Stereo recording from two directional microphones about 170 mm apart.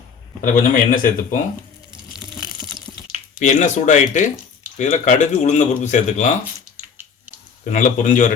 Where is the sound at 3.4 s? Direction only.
45° left (ahead or behind).